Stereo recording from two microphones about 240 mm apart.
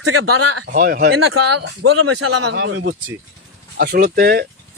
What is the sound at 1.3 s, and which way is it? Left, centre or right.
Speech, right.